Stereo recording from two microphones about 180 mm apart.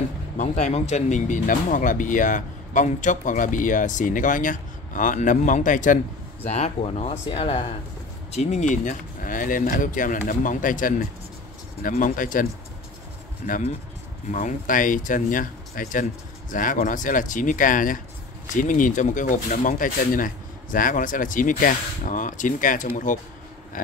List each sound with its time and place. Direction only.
0.4 s speech: 40° left (ahead or behind)
13.5 s speech: 40° left (ahead or behind)